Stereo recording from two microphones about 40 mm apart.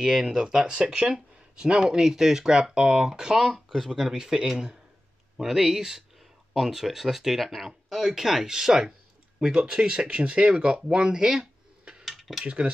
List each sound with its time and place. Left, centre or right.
0.0 s speech: centre
3.5 s speech: centre
3.9 s speech: centre
12.0 s cutlery: centre
12.4 s speech: right